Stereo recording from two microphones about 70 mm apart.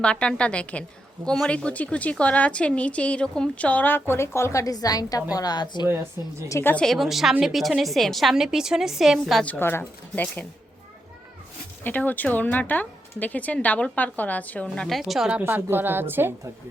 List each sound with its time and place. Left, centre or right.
0.0 s a woman's voice: centre; by 4.6 s left
4.6 s a woman's voice: left
6.2 s speech: right
6.8 s a woman's voice: centre
9.6 s speech: left
11.8 s a woman's voice: left
14.8 s a woman's voice: centre
15.4 s speech: right